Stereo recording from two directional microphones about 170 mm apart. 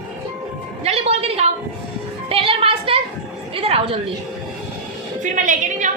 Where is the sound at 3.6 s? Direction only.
35° right (ahead or behind).